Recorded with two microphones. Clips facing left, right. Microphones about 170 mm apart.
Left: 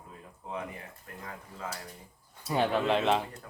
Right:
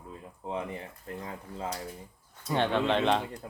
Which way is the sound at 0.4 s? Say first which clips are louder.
Right 4 dB; 30° right (ahead or behind).